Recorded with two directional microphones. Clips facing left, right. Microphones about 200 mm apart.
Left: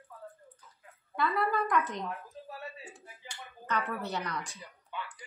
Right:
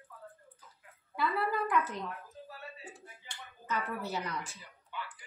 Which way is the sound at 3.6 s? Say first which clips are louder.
Left 2 dB; 5° right (ahead or behind).